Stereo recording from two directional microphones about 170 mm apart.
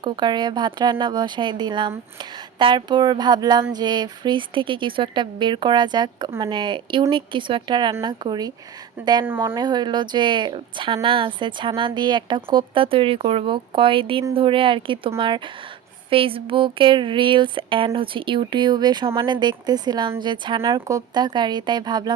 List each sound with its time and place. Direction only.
0.0 s speech: 25° right (ahead or behind)
9.0 s speech: 10° right (ahead or behind)
9.6 s a woman's voice: 25° right (ahead or behind)